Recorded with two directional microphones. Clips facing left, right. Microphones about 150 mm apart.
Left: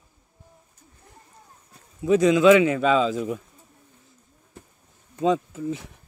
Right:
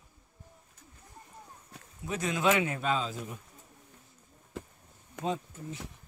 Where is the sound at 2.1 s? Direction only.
90° left.